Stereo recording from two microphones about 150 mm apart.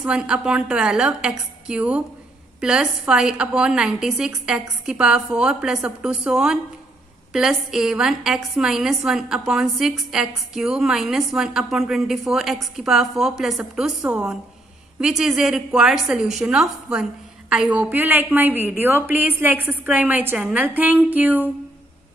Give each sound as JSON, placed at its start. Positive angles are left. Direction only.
{"t": 0.0, "sound": "a woman's voice", "side_deg": -5}